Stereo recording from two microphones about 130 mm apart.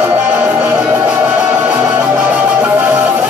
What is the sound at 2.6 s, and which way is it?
Music, 10° right (ahead or behind).